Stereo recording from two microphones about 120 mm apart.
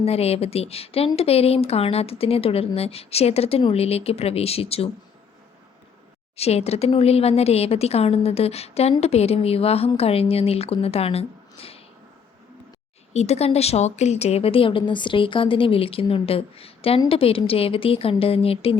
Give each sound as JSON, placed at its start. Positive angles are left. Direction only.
{"t": 0.0, "sound": "a woman's voice", "side_deg": 60}
{"t": 6.3, "sound": "a woman's voice", "side_deg": 60}
{"t": 13.1, "sound": "speech", "side_deg": 65}